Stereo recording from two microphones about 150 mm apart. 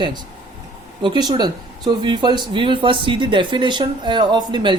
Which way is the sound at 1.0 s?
30° right (ahead or behind).